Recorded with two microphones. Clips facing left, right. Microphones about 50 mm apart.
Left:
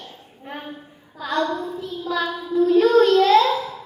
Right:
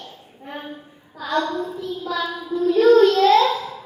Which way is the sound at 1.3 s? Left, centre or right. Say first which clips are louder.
Even; centre.